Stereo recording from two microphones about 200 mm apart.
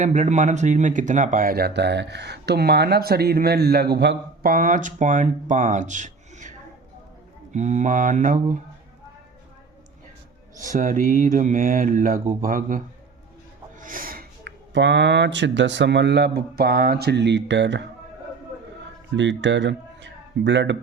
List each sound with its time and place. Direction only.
0.0 s speech: 40° right (ahead or behind); by 4.5 s 60° right (ahead or behind)
4.5 s speech: 40° right (ahead or behind)
7.5 s speech: 35° right (ahead or behind)
10.6 s speech: 40° right (ahead or behind); by 17.8 s 65° right (ahead or behind)
19.1 s speech: 65° right (ahead or behind)